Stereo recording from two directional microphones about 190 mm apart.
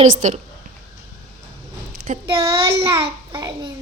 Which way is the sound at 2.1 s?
40° right (ahead or behind).